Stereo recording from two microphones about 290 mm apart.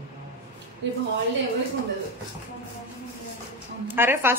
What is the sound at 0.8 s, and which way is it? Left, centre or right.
Speech, right.